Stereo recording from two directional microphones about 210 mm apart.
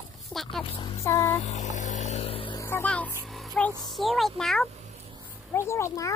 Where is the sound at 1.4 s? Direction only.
35° left (ahead or behind).